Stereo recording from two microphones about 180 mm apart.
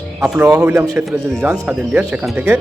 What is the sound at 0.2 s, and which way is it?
Speech, 10° right (ahead or behind).